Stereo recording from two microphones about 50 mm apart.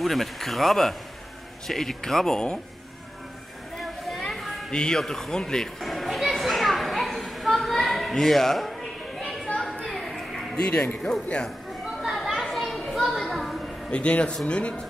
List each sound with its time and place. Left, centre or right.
0.0 s speech: centre
3.8 s a sound: centre
4.6 s speech: centre
5.8 s children playing: centre
8.2 s speech: centre
9.8 s music: centre
10.7 s speech: left
11.2 s speech: centre
12.0 s a sound: centre
13.8 s speech: left